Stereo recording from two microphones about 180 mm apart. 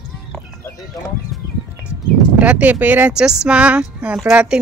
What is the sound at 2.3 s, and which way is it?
A woman's voice, 5° right (ahead or behind).